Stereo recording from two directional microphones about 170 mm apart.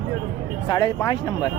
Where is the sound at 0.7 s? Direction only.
25° left (ahead or behind).